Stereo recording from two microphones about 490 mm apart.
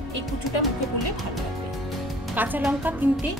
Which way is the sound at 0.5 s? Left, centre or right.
Left.